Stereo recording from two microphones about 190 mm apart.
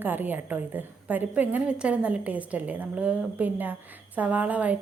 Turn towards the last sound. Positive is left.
turn(degrees=-10)  # may be behind; listen again after turning